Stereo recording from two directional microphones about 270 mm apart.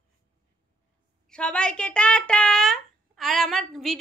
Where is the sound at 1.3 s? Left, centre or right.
Centre.